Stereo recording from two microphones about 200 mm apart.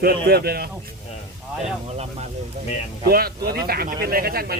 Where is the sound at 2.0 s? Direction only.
35° right (ahead or behind).